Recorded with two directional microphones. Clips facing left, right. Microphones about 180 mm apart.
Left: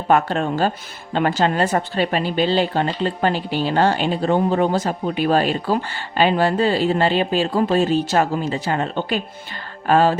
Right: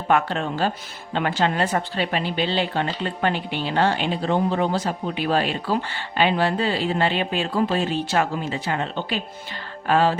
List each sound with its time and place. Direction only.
0.1 s speech: 45° left (ahead or behind)